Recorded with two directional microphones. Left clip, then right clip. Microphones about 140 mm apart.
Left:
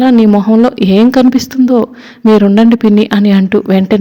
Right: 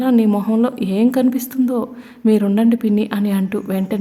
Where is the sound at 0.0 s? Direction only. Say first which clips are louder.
Left 8 dB; 40° left (ahead or behind).